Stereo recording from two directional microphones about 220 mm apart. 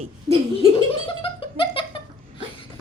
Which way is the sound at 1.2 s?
25° left (ahead or behind).